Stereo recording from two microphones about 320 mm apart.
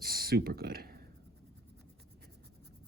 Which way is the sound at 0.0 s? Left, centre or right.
Right.